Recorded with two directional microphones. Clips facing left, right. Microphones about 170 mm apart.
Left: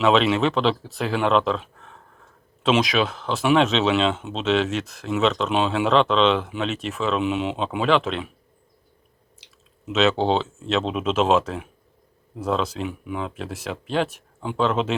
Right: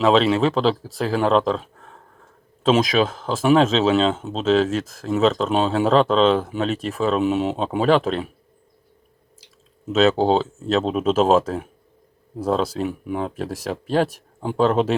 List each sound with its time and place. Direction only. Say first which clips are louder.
0.0 s speech: right 2 dB; 35° right (ahead or behind)
9.8 s speech: right 3 dB; 35° right (ahead or behind)